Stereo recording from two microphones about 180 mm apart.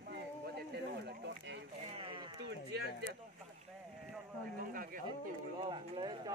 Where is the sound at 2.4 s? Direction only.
65° right (ahead or behind).